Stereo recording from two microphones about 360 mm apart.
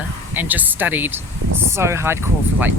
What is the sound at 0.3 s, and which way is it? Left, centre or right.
Speech, centre.